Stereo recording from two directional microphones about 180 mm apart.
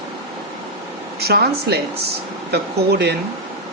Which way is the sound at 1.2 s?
60° right (ahead or behind).